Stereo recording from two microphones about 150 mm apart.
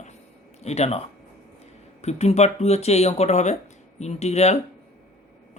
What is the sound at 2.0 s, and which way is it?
Speech, 45° left (ahead or behind).